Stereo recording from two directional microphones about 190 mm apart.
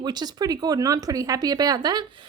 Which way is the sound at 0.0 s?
20° right (ahead or behind).